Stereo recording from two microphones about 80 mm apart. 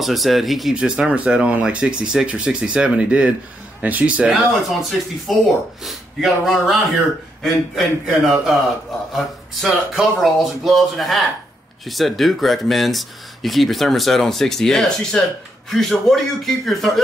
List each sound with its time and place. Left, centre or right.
0.0 s speech: centre
4.4 s speech: centre